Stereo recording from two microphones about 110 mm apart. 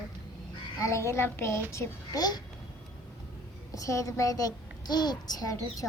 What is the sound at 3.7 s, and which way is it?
A child's voice, 30° left (ahead or behind).